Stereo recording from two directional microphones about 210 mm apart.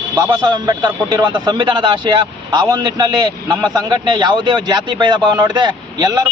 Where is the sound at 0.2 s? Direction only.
20° right (ahead or behind).